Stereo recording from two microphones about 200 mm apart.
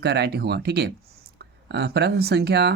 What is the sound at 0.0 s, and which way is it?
Speech, 55° right (ahead or behind).